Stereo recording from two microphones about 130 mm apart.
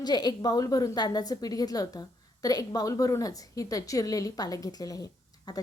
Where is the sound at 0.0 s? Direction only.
35° left (ahead or behind).